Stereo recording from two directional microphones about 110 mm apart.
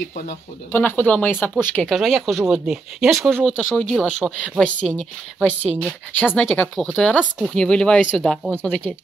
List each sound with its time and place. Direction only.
0.7 s speech: 20° left (ahead or behind)
1.8 s speech: centre (ahead or behind)